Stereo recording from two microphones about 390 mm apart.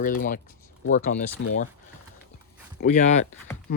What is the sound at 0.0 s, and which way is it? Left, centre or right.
Speech, left.